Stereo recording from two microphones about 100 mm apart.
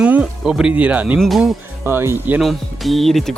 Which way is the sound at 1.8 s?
25° right (ahead or behind).